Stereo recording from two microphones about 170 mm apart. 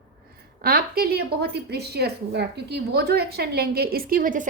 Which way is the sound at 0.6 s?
65° right (ahead or behind).